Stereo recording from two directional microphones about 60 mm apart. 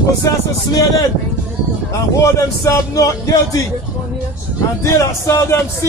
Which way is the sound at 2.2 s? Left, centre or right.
Left.